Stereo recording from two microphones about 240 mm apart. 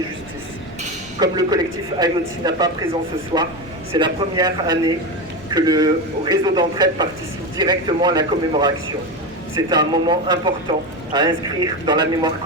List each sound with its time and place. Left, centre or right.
1.2 s a man's voice: centre